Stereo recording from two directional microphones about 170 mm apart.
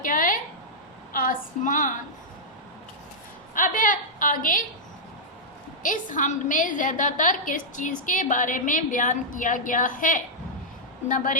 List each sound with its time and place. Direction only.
0.0 s a sound: 50° left (ahead or behind)
1.1 s a woman's voice: 55° left (ahead or behind)
3.5 s a woman's voice: 50° left (ahead or behind)
5.8 s a woman's voice: 50° left (ahead or behind)